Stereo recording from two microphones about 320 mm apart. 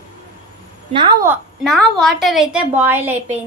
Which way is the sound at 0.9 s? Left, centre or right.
Centre.